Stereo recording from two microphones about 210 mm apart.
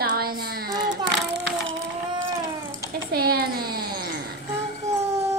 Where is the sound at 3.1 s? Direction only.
45° right (ahead or behind).